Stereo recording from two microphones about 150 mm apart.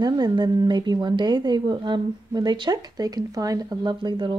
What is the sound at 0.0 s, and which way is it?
Speech, 30° right (ahead or behind).